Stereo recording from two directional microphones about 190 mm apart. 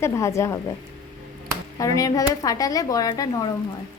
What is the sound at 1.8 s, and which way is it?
Speech, 20° left (ahead or behind).